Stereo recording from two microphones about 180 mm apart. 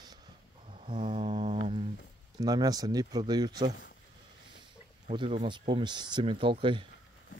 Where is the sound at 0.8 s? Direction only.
30° right (ahead or behind).